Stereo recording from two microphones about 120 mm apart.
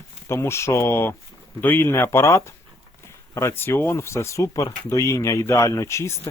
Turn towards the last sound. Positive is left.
turn(degrees=25)  # may be behind; listen again after turning